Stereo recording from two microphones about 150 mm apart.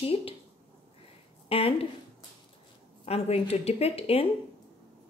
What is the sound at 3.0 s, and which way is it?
A woman's voice, 45° left (ahead or behind).